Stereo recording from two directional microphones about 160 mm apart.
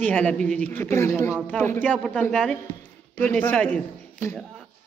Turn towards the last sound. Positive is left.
turn(degrees=10)  # may be behind; listen again after turning